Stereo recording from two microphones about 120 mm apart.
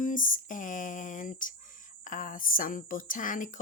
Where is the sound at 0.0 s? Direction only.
90° left.